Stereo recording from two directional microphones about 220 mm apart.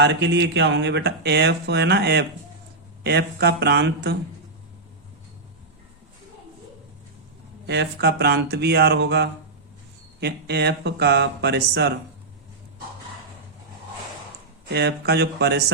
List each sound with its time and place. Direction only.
0.0 s speech: 50° right (ahead or behind)
7.7 s speech: 50° right (ahead or behind)
14.7 s speech: 50° right (ahead or behind)